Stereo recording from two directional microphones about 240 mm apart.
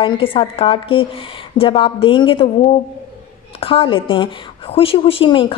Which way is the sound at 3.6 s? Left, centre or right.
Left.